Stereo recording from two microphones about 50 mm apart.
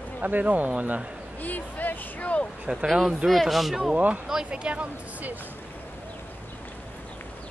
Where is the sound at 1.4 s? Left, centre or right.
Left.